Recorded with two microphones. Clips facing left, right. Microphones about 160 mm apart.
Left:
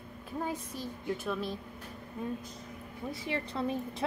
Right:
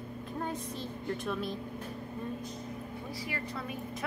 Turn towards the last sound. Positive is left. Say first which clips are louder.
# left 5 dB
turn(degrees=30)  # may be behind; listen again after turning